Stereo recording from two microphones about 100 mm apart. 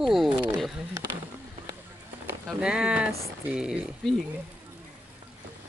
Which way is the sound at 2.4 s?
5° right (ahead or behind).